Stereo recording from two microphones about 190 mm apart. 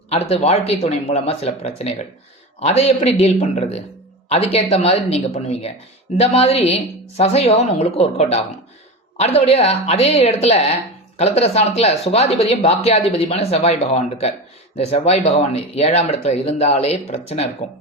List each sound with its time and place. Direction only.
0.1 s speech: 35° left (ahead or behind)